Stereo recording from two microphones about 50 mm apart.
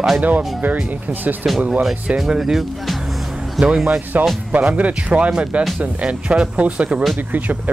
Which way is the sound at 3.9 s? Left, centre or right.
Right.